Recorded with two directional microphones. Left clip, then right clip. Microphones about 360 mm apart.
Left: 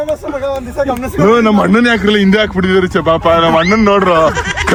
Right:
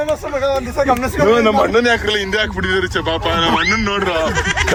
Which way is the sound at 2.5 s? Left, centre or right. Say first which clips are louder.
Left 5 dB; left.